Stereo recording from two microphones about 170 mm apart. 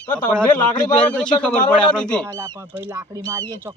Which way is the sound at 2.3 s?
20° right (ahead or behind).